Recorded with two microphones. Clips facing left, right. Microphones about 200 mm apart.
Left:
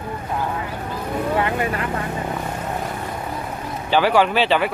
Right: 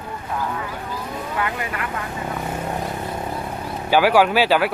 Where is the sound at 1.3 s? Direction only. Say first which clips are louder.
Left 4 dB; 30° left (ahead or behind).